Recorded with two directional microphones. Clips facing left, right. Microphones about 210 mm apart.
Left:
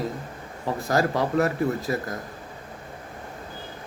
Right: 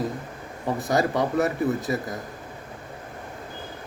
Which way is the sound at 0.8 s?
Centre (ahead or behind).